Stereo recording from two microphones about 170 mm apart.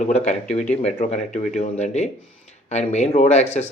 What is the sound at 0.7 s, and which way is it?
Speech, 40° left (ahead or behind).